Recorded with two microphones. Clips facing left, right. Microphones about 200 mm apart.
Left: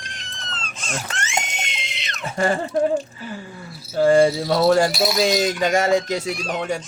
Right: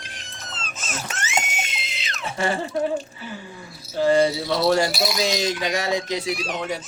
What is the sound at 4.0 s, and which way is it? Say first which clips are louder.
Keys jangling: left 3 dB; 50° left (ahead or behind).